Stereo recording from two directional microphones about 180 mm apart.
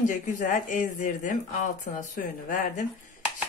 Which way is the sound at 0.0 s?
45° left (ahead or behind).